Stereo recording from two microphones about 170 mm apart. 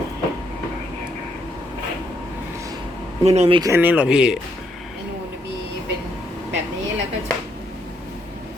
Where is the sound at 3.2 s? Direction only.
40° right (ahead or behind).